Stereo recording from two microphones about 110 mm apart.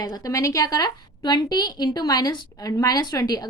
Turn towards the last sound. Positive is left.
turn(degrees=35)  # may be behind; listen again after turning